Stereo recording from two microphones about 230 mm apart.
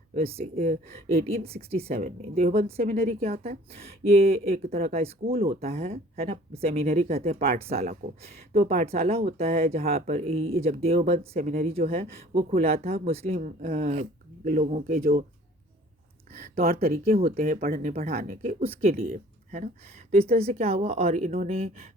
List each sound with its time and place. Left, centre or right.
0.1 s speech: right
0.5 s speech: right
2.8 s speech: right
16.4 s speech: right
18.9 s speech: right